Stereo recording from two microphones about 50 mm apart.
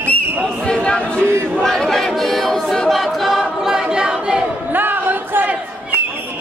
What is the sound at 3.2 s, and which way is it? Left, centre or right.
A capella, centre.